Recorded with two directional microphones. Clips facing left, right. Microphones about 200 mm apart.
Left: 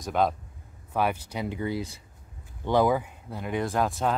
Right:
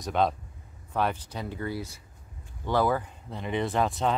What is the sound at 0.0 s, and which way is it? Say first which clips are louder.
Speech: left 1 dB; centre (ahead or behind).